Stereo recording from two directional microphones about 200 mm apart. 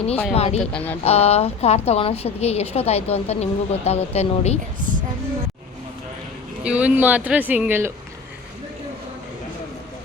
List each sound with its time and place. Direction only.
0.3 s a woman's voice: 30° left (ahead or behind)
0.6 s speech: 5° left (ahead or behind)
1.0 s a woman's voice: 30° left (ahead or behind)
4.9 s a sound: 40° right (ahead or behind)
6.6 s speech: 5° right (ahead or behind)